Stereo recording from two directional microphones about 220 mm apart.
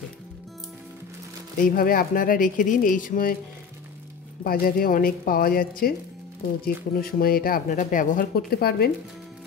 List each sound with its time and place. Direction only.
1.6 s speech: 40° left (ahead or behind)
4.4 s speech: 40° left (ahead or behind)